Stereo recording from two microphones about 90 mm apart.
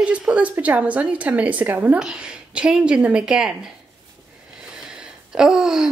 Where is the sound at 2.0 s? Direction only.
10° right (ahead or behind).